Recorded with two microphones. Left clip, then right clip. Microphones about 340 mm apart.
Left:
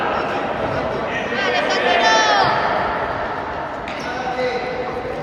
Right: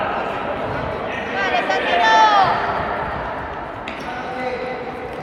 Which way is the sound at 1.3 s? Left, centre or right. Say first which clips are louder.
Even; centre.